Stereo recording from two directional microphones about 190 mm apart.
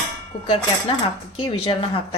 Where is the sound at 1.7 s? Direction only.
25° left (ahead or behind).